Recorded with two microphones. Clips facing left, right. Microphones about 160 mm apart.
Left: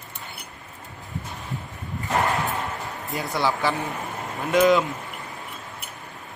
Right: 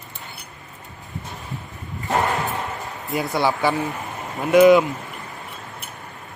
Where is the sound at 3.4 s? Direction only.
15° right (ahead or behind).